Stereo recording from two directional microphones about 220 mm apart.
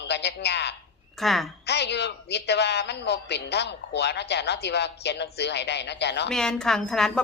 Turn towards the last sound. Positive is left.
turn(degrees=0)  # may be behind; listen again after turning